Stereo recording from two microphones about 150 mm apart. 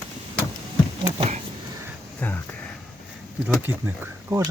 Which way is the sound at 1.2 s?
45° right (ahead or behind).